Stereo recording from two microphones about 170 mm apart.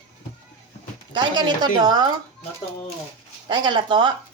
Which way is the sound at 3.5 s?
25° right (ahead or behind).